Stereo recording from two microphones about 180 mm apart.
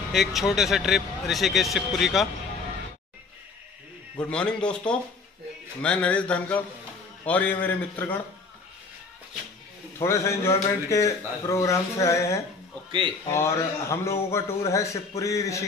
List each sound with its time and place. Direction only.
0.1 s speech: centre (ahead or behind)
4.2 s a man's voice: 5° left (ahead or behind)
9.9 s a man's voice: 15° left (ahead or behind)